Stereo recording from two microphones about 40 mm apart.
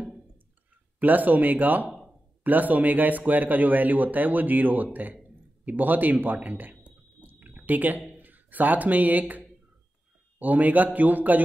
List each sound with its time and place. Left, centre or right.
0.9 s speech: right
1.9 s a sound: centre
2.4 s speech: right
7.2 s drip: right
8.1 s speech: right
10.4 s speech: right